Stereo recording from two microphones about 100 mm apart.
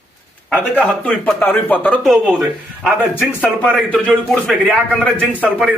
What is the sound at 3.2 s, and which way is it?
Speech, 15° left (ahead or behind).